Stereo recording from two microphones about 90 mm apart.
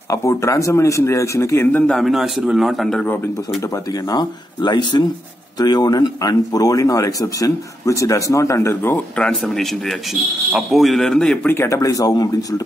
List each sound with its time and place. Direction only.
0.1 s speech: 35° left (ahead or behind)
1.9 s a man's voice: centre (ahead or behind)
4.1 s speech: 50° left (ahead or behind); by 9.0 s 30° left (ahead or behind)
9.2 s a man's voice: 5° left (ahead or behind)
11.4 s speech: 25° left (ahead or behind)
11.7 s speech: 40° left (ahead or behind)